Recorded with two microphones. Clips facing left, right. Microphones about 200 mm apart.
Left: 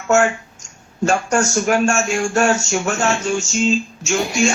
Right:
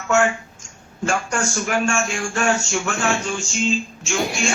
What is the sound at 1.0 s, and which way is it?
Speech, 40° left (ahead or behind).